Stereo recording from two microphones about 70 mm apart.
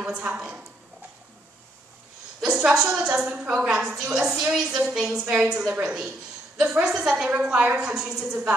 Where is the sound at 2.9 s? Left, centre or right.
Centre.